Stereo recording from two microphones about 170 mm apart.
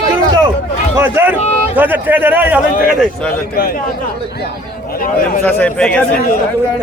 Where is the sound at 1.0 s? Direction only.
10° right (ahead or behind).